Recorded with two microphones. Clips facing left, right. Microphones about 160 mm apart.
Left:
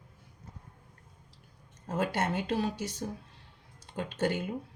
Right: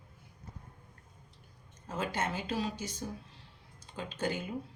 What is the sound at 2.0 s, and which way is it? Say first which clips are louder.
Speech: left 4 dB; 70° left (ahead or behind).